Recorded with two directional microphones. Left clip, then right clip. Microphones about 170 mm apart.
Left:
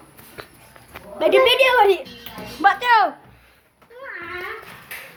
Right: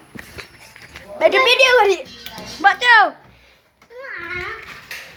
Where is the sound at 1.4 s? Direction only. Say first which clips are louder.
Right 2 dB; 5° right (ahead or behind).